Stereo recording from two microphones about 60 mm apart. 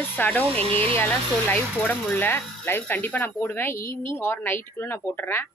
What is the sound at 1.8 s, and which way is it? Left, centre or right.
Speech, left.